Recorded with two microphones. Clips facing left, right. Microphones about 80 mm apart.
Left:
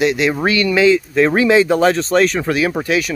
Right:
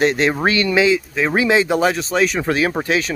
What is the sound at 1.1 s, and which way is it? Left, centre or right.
Speech, centre.